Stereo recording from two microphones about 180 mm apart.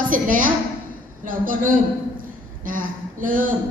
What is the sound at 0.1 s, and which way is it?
A woman's voice, 50° right (ahead or behind).